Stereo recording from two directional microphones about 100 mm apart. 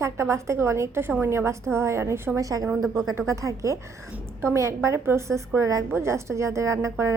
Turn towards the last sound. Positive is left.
turn(degrees=-30)  # may be behind; listen again after turning